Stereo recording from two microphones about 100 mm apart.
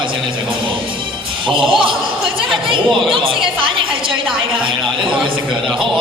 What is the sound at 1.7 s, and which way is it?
Speech, 60° right (ahead or behind).